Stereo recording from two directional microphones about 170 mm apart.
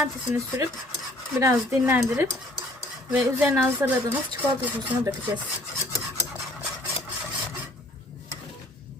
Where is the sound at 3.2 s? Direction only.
15° right (ahead or behind).